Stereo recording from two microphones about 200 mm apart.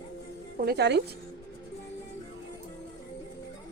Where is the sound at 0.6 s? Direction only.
55° right (ahead or behind).